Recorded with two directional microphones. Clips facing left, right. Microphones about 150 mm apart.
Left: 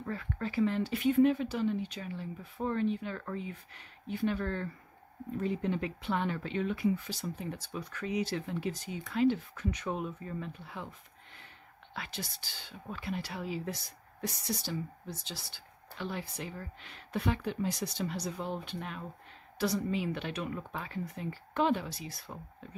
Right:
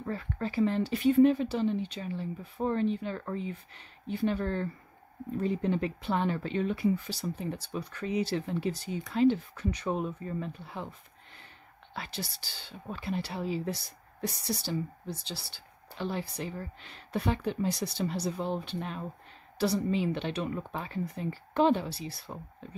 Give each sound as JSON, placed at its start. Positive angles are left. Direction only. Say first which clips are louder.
{"t": 0.0, "sound": "speech", "louder": "right 3 dB", "side_deg": -30}
{"t": 11.9, "sound": "speech", "louder": "right 3 dB", "side_deg": -35}